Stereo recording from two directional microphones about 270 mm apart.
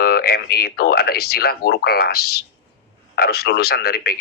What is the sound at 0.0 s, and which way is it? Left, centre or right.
Speech, left.